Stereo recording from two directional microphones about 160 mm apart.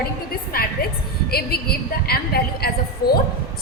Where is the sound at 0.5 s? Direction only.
65° left (ahead or behind).